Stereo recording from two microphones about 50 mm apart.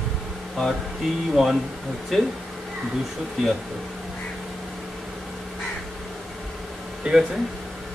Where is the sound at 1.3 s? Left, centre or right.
Centre.